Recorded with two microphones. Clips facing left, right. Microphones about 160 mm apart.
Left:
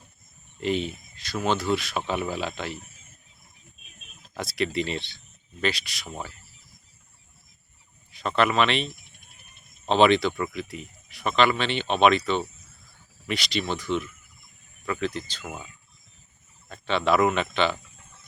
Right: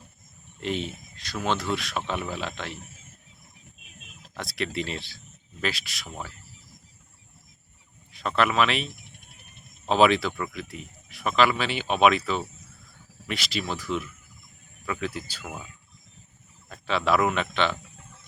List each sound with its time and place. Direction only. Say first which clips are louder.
0.6 s speech: left 3 dB; centre (ahead or behind)
4.4 s speech: left 3 dB; centre (ahead or behind)
8.1 s speech: left 1 dB; centre (ahead or behind)
16.6 s speech: left 1 dB; centre (ahead or behind)